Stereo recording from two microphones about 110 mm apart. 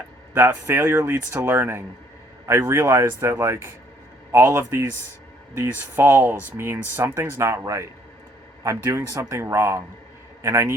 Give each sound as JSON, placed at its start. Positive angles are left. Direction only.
{"t": 0.3, "sound": "speech", "side_deg": -20}